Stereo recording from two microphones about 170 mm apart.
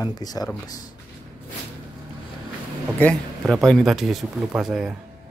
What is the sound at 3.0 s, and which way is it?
Speech, 5° left (ahead or behind).